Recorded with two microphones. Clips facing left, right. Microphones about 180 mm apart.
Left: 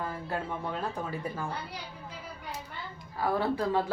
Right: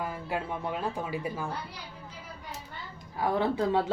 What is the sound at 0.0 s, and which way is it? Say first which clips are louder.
Speech: right 1 dB; 10° right (ahead or behind).